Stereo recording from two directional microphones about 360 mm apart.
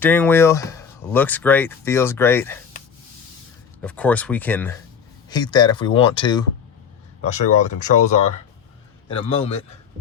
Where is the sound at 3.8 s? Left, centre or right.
Centre.